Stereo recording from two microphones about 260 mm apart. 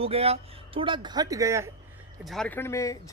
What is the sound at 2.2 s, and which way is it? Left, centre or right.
Speech, centre.